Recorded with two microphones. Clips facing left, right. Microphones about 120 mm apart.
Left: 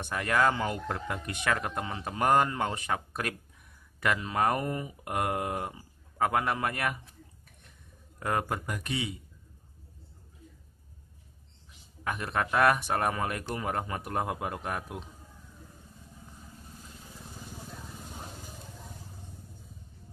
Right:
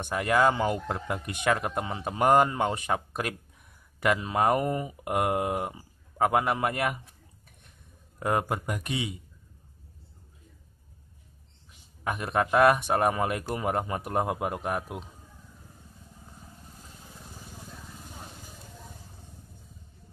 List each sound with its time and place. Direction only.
0.0 s speech: 15° right (ahead or behind)
8.2 s speech: 20° right (ahead or behind)
12.0 s speech: 15° right (ahead or behind)